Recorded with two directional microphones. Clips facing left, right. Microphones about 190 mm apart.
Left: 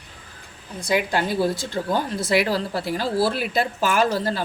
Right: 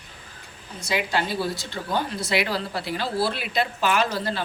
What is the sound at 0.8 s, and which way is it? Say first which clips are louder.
A woman's voice: left 3 dB; 50° left (ahead or behind).